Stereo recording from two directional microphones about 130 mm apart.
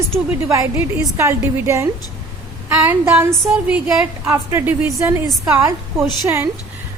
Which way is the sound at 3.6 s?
10° right (ahead or behind).